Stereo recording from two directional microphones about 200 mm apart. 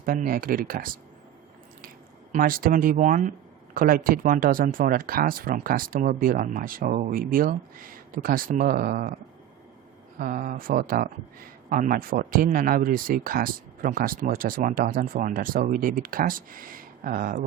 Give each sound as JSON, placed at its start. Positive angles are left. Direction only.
{"t": 0.0, "sound": "speech", "side_deg": -45}
{"t": 2.3, "sound": "speech", "side_deg": -45}
{"t": 10.2, "sound": "speech", "side_deg": -40}